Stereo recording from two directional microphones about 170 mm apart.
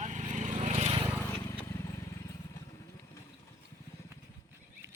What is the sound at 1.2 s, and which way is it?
Vehicle, 15° left (ahead or behind).